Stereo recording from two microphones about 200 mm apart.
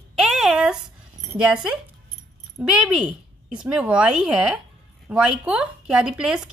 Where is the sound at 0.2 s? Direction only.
Centre (ahead or behind).